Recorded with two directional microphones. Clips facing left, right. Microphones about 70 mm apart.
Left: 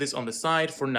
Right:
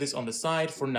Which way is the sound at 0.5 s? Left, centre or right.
Left.